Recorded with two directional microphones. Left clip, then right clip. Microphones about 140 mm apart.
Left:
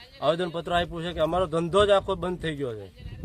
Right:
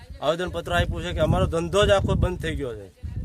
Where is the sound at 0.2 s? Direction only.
35° right (ahead or behind).